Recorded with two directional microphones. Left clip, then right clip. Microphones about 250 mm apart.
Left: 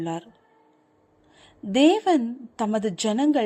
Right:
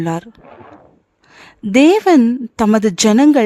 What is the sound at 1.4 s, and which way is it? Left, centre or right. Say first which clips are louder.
A woman's voice: right 8 dB; right.